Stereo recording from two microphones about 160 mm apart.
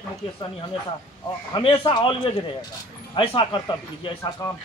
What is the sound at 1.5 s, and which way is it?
A man's voice, 30° left (ahead or behind).